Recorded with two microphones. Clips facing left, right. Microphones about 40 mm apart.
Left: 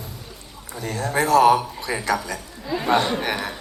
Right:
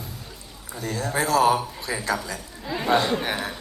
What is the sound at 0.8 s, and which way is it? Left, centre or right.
A man's voice, left.